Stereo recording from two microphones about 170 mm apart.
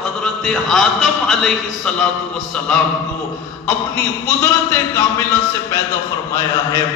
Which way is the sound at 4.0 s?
15° left (ahead or behind).